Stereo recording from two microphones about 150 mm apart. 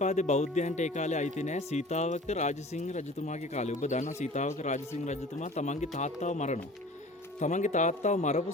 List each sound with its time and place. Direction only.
0.0 s speech: 50° left (ahead or behind)